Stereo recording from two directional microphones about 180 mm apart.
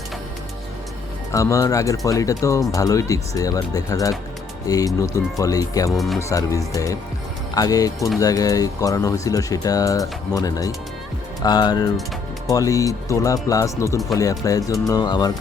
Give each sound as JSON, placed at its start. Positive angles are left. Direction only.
{"t": 1.3, "sound": "speech", "side_deg": 15}
{"t": 5.9, "sound": "speech", "side_deg": 0}
{"t": 6.1, "sound": "speech", "side_deg": 15}